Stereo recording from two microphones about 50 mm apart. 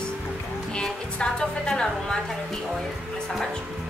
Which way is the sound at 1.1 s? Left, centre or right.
Centre.